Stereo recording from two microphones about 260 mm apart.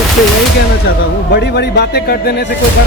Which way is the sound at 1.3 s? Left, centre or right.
Left.